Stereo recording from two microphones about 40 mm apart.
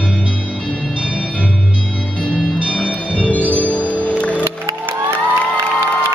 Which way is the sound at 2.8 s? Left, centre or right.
Left.